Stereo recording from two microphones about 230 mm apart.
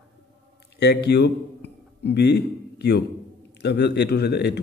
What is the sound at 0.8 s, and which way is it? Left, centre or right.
A man's voice, left.